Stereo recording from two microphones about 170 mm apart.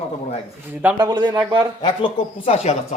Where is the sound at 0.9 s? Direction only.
30° right (ahead or behind).